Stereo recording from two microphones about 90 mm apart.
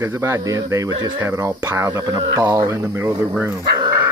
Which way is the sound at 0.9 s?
50° right (ahead or behind).